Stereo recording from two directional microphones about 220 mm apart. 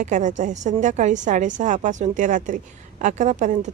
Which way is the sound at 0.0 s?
35° right (ahead or behind).